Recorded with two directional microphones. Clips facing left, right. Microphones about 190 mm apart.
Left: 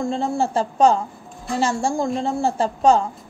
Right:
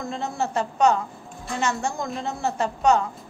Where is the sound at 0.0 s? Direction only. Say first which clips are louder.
Left 6 dB; 30° left (ahead or behind).